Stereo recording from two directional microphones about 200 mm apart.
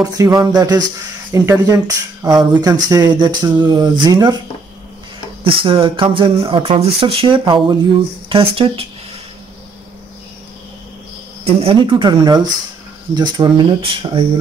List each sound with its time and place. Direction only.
0.0 s speech: 15° right (ahead or behind)
5.4 s speech: 25° right (ahead or behind)
11.4 s speech: 25° right (ahead or behind)